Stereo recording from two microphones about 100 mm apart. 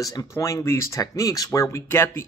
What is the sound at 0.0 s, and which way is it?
A man's voice, 35° left (ahead or behind).